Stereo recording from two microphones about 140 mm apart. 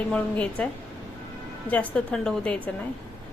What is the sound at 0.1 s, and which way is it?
Speech, 10° left (ahead or behind).